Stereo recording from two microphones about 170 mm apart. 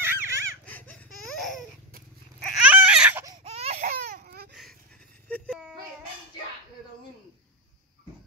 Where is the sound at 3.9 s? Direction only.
65° right (ahead or behind).